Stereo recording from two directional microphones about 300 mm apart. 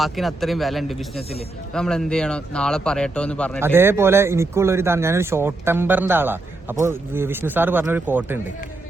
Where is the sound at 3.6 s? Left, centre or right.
Centre.